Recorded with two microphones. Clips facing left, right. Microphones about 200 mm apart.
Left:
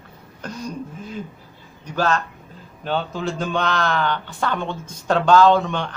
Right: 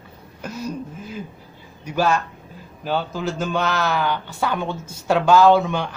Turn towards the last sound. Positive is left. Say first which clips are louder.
# right 1 dB
turn(degrees=-10)  # may be behind; listen again after turning